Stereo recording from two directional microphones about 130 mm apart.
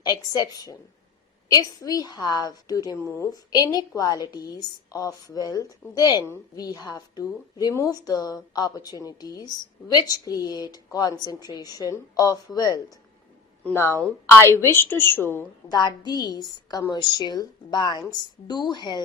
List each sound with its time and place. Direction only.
0.0 s a woman's voice: 30° left (ahead or behind)
15.7 s a woman's voice: 35° left (ahead or behind)